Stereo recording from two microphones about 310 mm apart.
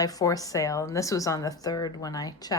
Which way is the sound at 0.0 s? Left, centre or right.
Centre.